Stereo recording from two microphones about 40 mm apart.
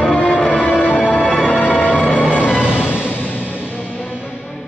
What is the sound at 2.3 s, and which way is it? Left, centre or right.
Music, right.